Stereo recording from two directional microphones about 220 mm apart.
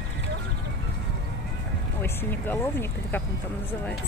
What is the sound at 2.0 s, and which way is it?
Speech, 10° left (ahead or behind).